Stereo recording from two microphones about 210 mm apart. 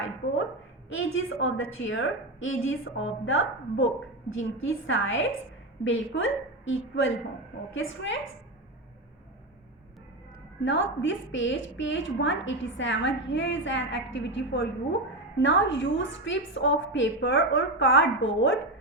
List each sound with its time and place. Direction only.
0.9 s a woman's voice: 65° left (ahead or behind)
10.6 s a woman's voice: 60° left (ahead or behind)